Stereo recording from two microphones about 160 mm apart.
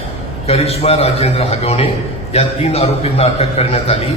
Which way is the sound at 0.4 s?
40° left (ahead or behind).